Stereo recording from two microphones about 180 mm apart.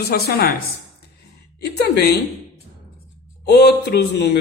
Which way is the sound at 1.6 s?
65° left (ahead or behind).